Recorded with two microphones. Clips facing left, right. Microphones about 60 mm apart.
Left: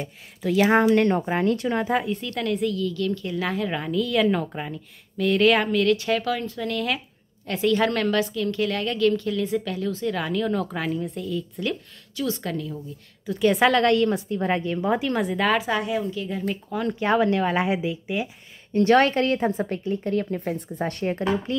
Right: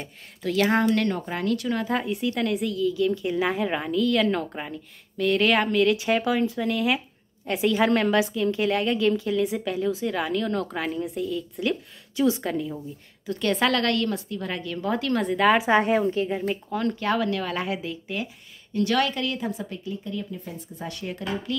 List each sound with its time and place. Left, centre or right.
0.0 s a woman's voice: centre; by 1.9 s left
2.0 s a woman's voice: centre
3.9 s speech: centre
5.9 s a woman's voice: centre
12.2 s a woman's voice: centre
13.3 s a woman's voice: centre
15.2 s speech: centre
15.5 s speech: right
15.8 s a woman's voice: right
17.0 s a woman's voice: left
18.7 s a woman's voice: left